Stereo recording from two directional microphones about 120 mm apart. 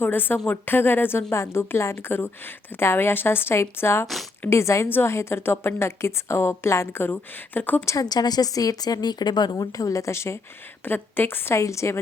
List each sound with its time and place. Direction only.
0.0 s a woman's voice: 15° left (ahead or behind)
7.9 s a woman's voice: 35° left (ahead or behind)